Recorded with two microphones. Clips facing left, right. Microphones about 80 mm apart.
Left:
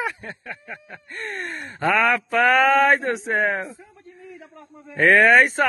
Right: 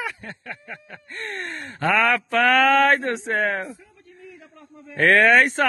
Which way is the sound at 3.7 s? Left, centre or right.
Left.